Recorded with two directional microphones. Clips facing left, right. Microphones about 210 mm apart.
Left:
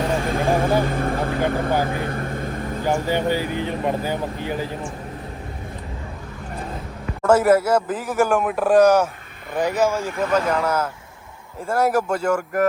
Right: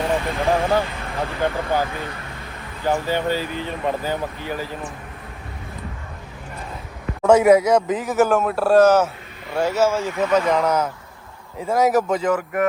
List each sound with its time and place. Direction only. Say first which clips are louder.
0.2 s speech: left 1 dB; 50° left (ahead or behind)
3.1 s speech: left 1 dB; 15° left (ahead or behind)
7.3 s a man's voice: right 2 dB; 5° left (ahead or behind)
11.6 s a man's voice: right 2 dB; 10° right (ahead or behind)
12.1 s speech: right 1 dB; 10° left (ahead or behind)